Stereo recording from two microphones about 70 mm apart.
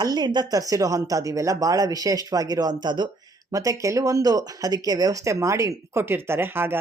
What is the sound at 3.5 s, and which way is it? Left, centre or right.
Speech, right.